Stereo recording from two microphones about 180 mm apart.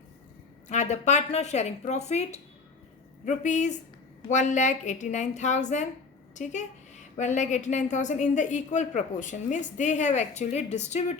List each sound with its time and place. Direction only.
0.7 s a woman's voice: 40° left (ahead or behind)